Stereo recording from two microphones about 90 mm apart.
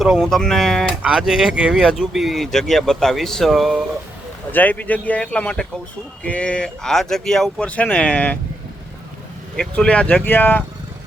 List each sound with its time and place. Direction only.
0.0 s speech: centre (ahead or behind)
1.0 s speech: 10° right (ahead or behind)
4.5 s a man's voice: 20° left (ahead or behind)
7.7 s a man's voice: 15° left (ahead or behind)
9.6 s a man's voice: 10° left (ahead or behind)